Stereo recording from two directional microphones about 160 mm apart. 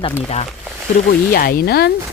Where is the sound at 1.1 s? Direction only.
65° left (ahead or behind).